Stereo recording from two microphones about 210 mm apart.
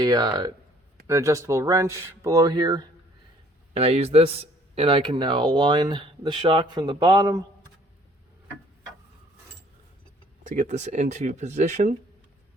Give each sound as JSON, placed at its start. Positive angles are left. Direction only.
{"t": 0.0, "sound": "speech", "side_deg": -20}
{"t": 10.4, "sound": "speech", "side_deg": -35}